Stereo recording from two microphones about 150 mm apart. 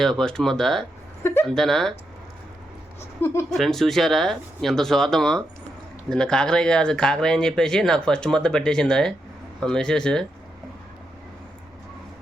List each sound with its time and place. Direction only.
0.0 s speech: 5° left (ahead or behind)
1.2 s speech: 15° left (ahead or behind)
1.5 s speech: centre (ahead or behind)
3.0 s speech: 15° left (ahead or behind)
3.5 s speech: centre (ahead or behind)